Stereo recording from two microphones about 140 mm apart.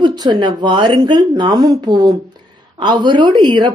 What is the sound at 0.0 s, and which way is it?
Speech, 35° right (ahead or behind).